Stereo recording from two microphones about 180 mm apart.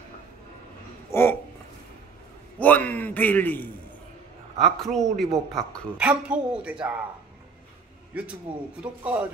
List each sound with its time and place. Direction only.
1.1 s a sound: 15° left (ahead or behind)
2.6 s a man's voice: 10° left (ahead or behind)
8.1 s a man's voice: 5° right (ahead or behind)